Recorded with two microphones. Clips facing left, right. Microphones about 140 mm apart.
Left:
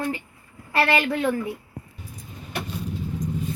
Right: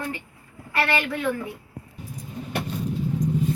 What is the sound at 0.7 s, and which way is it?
Speech, 25° left (ahead or behind).